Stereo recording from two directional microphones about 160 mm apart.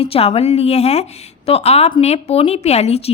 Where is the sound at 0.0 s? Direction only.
35° left (ahead or behind).